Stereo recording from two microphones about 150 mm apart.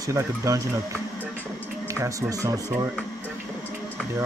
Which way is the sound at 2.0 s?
20° right (ahead or behind).